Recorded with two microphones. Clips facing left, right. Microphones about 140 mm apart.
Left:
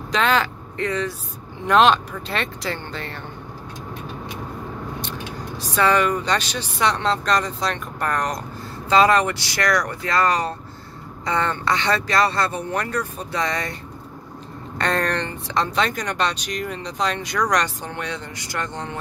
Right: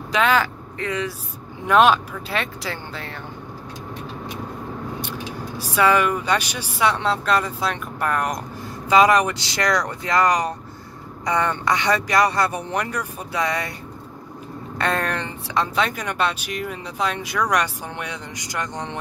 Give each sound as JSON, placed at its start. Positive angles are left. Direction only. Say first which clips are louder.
{"t": 0.1, "sound": "speech", "louder": "right 1 dB", "side_deg": -5}
{"t": 5.6, "sound": "speech", "louder": "right 1 dB", "side_deg": -10}
{"t": 14.8, "sound": "speech", "louder": "left 1 dB", "side_deg": -5}